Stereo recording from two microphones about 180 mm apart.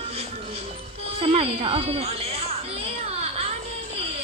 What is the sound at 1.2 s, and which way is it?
A woman's voice, 30° right (ahead or behind).